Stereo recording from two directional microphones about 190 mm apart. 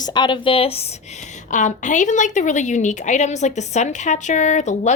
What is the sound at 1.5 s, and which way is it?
A woman's voice, 40° left (ahead or behind).